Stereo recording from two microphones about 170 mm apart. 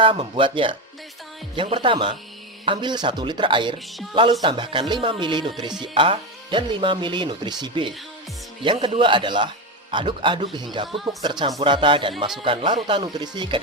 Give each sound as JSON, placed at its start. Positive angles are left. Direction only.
{"t": 0.0, "sound": "speech", "side_deg": -30}